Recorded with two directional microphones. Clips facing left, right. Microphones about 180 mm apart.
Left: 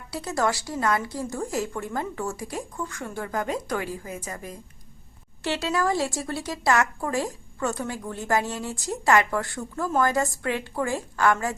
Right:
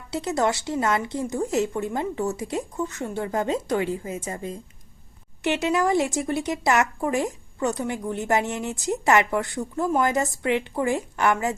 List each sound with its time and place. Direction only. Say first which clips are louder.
0.1 s a woman's voice: right 3 dB; 20° right (ahead or behind)